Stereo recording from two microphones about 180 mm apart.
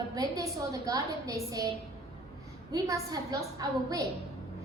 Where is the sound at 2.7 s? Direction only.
20° right (ahead or behind).